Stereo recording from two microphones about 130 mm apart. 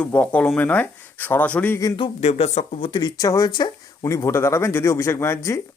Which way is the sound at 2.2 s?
55° left (ahead or behind).